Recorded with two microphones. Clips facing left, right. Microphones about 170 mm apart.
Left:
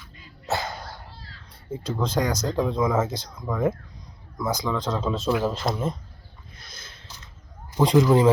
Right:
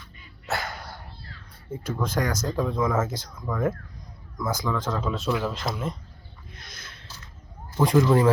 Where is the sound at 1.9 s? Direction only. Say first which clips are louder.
Left 2 dB; 15° left (ahead or behind).